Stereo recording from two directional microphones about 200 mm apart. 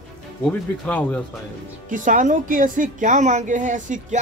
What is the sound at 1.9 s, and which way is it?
A woman's voice, 40° right (ahead or behind).